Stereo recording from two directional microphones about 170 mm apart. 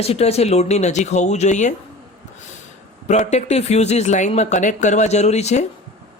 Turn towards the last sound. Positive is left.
turn(degrees=40)  # may be behind; listen again after turning